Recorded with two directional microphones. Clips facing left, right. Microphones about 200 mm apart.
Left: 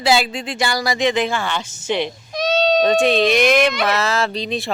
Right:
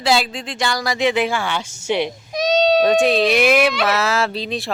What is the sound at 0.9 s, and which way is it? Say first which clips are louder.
Speech: right 1 dB; 10° right (ahead or behind).